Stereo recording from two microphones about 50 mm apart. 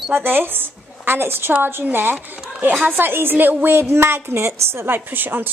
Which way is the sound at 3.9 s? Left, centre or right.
Right.